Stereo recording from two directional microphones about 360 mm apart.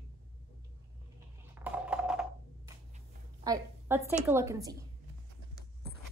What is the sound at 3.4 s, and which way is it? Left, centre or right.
A woman's voice, centre.